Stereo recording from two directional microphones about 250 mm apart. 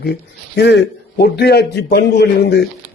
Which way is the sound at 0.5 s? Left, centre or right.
Left.